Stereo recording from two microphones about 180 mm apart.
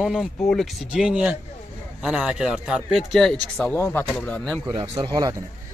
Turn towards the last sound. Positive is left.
turn(degrees=-20)  # may be behind; listen again after turning